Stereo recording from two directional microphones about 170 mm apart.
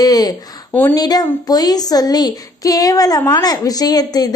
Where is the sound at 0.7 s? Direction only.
10° left (ahead or behind).